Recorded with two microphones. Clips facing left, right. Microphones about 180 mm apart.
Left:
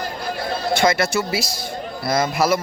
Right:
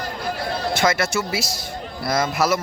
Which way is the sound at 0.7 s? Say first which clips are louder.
Left 3 dB; 5° right (ahead or behind).